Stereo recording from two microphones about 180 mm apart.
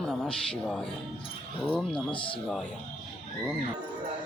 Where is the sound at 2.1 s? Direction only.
30° left (ahead or behind).